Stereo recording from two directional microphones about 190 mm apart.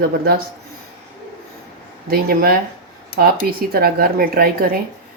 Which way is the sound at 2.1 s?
50° right (ahead or behind).